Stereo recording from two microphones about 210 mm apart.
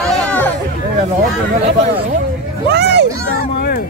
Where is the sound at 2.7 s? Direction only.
55° right (ahead or behind).